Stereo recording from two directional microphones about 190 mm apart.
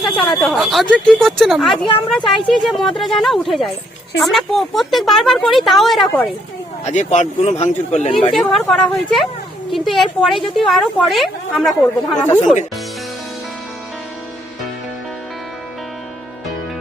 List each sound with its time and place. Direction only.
0.0 s speech: centre (ahead or behind)
6.8 s speech: 40° left (ahead or behind)
8.3 s speech: centre (ahead or behind)